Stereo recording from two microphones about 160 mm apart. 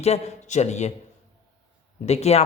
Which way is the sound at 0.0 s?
45° left (ahead or behind).